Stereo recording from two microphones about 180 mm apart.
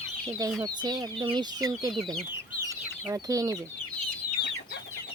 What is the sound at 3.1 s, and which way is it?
Speech, 20° right (ahead or behind).